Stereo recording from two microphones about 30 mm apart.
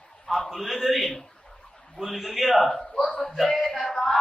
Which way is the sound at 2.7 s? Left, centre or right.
Centre.